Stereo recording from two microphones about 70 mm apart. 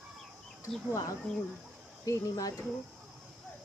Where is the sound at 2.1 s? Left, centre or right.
Left.